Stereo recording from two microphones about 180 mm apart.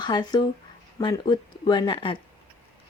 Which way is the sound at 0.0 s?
25° left (ahead or behind).